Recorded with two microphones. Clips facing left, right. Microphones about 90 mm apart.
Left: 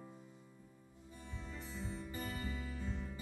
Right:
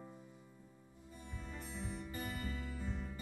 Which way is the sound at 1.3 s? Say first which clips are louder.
Even; 5° right (ahead or behind).